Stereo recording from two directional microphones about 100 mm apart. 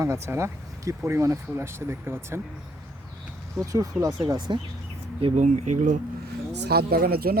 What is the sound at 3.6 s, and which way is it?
Speech, 35° right (ahead or behind).